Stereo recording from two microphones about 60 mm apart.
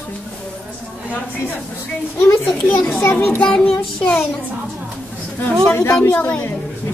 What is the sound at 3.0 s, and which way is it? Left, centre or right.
Speech, left.